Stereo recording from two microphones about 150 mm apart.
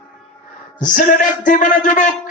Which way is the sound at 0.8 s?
60° left (ahead or behind).